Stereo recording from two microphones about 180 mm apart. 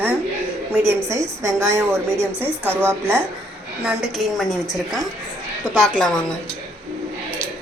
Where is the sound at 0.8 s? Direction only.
15° right (ahead or behind).